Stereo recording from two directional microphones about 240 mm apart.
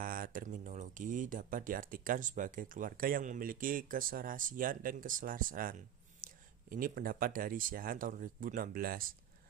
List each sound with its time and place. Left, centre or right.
0.0 s speech: right